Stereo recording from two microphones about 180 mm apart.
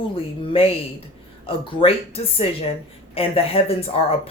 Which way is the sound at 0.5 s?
30° left (ahead or behind).